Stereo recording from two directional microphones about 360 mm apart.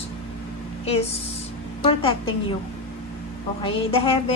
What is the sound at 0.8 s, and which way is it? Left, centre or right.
Speech, centre.